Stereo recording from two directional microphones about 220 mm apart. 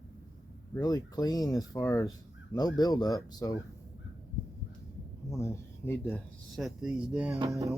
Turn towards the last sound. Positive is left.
turn(degrees=-15)  # may be behind; listen again after turning